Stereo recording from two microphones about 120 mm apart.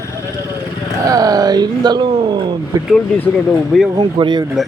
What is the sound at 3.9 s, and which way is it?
Speech, 40° right (ahead or behind).